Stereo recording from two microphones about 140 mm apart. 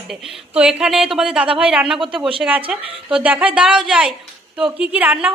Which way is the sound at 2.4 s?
10° right (ahead or behind).